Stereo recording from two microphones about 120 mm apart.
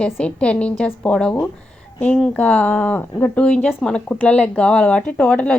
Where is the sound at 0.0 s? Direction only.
10° left (ahead or behind).